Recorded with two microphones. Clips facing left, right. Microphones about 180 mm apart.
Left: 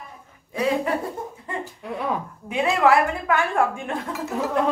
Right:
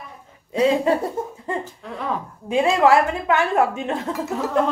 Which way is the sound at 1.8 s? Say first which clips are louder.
Left 1 dB; 10° left (ahead or behind).